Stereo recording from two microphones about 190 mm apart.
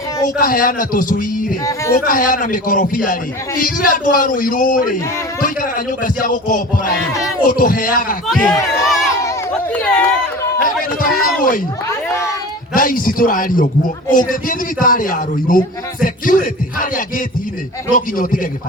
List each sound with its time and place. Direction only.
0.3 s a man's voice: 50° left (ahead or behind)
1.6 s a child's voice: 15° left (ahead or behind)
2.0 s a man's voice: 45° left (ahead or behind)
8.9 s a sound: centre (ahead or behind)
9.7 s speech: 5° left (ahead or behind)
10.6 s a man's voice: 50° left (ahead or behind)
11.9 s a child's voice: 15° left (ahead or behind)
12.7 s a man's voice: 45° left (ahead or behind)